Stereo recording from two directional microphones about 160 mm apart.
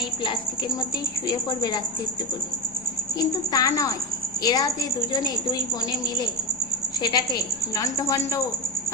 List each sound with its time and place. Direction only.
1.3 s speech: 25° left (ahead or behind)
3.2 s speech: 20° left (ahead or behind)